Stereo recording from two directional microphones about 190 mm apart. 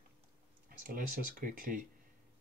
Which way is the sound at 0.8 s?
45° right (ahead or behind).